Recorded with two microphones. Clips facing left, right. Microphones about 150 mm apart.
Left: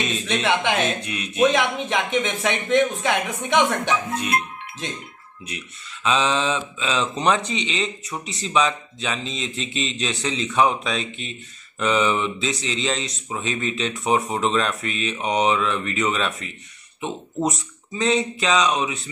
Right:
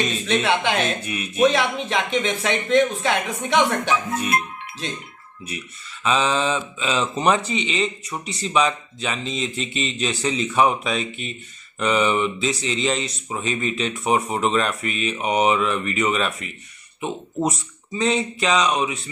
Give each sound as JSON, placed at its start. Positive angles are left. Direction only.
{"t": 0.0, "sound": "speech", "side_deg": 0}
{"t": 1.5, "sound": "speech", "side_deg": 15}
{"t": 6.0, "sound": "speech", "side_deg": 0}